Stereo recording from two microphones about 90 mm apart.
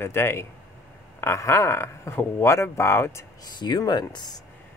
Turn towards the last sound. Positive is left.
turn(degrees=50)  # may be behind; listen again after turning